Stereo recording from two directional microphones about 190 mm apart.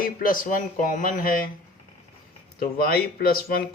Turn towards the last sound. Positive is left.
turn(degrees=50)  # may be behind; listen again after turning